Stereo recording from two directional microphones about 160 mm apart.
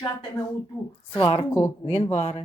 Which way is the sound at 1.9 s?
45° left (ahead or behind).